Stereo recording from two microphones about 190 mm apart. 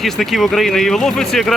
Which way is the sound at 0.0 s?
Centre (ahead or behind).